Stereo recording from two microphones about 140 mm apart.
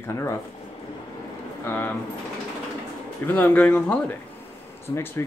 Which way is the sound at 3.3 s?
10° left (ahead or behind).